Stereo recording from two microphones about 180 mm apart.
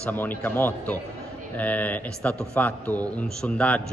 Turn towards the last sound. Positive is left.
turn(degrees=5)  # may be behind; listen again after turning